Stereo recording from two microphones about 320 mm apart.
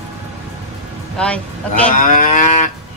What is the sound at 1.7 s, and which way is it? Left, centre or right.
Speech, left.